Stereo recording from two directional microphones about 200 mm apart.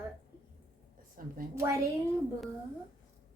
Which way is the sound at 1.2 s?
45° right (ahead or behind).